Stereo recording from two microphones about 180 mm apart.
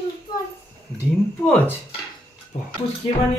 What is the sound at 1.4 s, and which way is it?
Speech, 10° left (ahead or behind).